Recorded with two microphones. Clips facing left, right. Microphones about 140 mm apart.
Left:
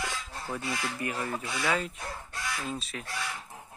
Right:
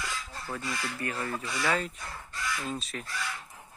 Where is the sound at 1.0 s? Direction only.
10° left (ahead or behind).